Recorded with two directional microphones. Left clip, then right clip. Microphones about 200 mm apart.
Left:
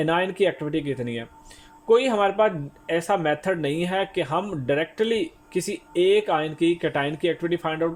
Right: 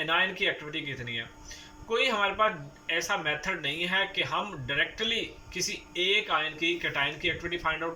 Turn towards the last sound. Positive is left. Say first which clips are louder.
# left 6 dB
turn(degrees=55)  # may be behind; listen again after turning